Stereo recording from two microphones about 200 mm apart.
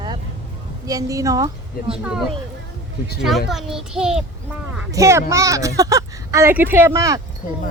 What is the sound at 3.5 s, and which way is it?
Speech, centre (ahead or behind).